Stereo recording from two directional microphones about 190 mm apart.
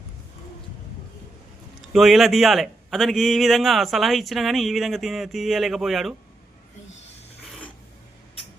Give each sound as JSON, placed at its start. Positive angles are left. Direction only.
{"t": 1.9, "sound": "a man's voice", "side_deg": 0}